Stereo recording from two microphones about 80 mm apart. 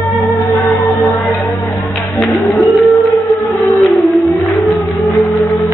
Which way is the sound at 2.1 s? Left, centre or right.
Centre.